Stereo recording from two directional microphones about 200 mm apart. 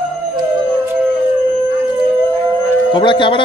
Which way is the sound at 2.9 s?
25° left (ahead or behind).